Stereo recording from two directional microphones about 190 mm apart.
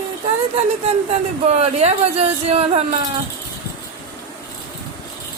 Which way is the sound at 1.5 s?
35° right (ahead or behind).